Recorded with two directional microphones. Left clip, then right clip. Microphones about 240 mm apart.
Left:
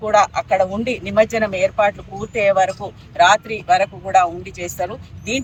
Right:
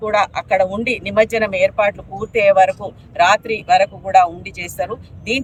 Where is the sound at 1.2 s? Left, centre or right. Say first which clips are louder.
Right 1 dB; right.